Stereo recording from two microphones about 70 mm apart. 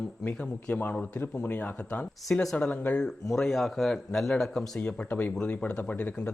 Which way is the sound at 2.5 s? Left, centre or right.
Left.